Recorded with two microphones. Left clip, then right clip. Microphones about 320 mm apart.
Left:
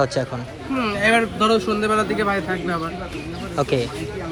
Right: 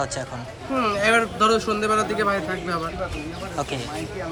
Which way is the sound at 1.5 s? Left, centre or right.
Right.